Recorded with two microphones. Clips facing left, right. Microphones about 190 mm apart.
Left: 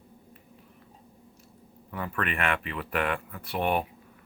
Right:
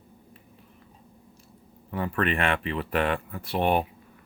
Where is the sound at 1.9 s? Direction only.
30° right (ahead or behind).